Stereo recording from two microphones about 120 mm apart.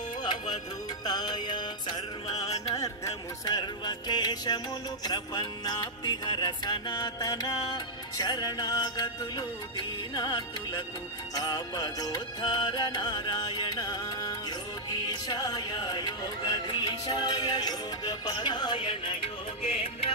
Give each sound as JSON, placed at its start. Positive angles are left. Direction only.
{"t": 0.2, "sound": "music", "side_deg": 40}
{"t": 2.4, "sound": "music", "side_deg": 30}